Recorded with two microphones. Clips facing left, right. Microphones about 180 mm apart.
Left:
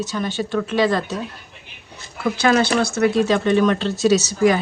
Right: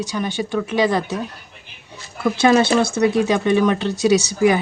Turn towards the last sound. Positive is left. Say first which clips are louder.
# right 1 dB
turn(degrees=-15)  # may be behind; listen again after turning